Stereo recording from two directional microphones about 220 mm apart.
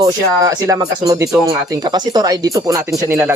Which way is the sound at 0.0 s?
15° right (ahead or behind).